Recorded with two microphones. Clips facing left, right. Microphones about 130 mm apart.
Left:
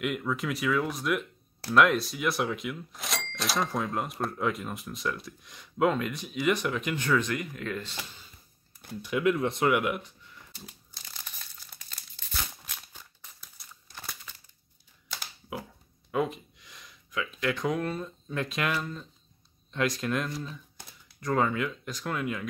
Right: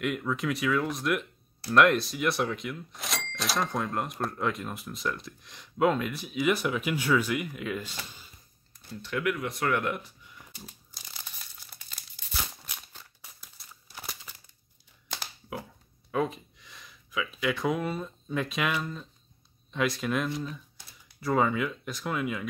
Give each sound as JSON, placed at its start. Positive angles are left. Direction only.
{"t": 0.0, "sound": "speech", "side_deg": 0}
{"t": 9.0, "sound": "speech", "side_deg": 15}
{"t": 9.3, "sound": "speech", "side_deg": 25}
{"t": 9.7, "sound": "speech", "side_deg": 10}
{"t": 13.2, "sound": "crumpling", "side_deg": -5}
{"t": 16.1, "sound": "speech", "side_deg": 0}